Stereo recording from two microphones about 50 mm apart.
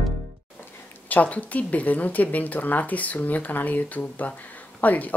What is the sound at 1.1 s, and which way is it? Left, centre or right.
A woman's voice, left.